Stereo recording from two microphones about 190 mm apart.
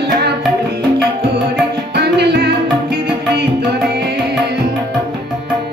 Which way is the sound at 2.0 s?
60° right (ahead or behind).